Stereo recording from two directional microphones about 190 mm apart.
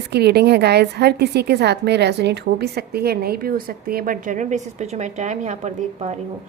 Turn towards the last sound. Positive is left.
turn(degrees=-35)  # may be behind; listen again after turning